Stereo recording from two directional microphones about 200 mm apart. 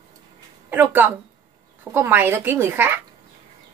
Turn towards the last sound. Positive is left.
turn(degrees=-10)  # may be behind; listen again after turning